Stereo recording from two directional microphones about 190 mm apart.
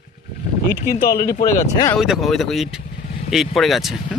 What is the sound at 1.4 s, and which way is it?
Speech, 15° left (ahead or behind).